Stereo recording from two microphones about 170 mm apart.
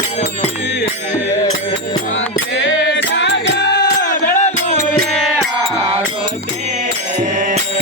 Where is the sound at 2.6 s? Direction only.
90° left; by 4.2 s 70° left (ahead or behind).